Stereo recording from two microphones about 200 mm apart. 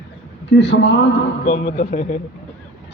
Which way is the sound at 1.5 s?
35° left (ahead or behind).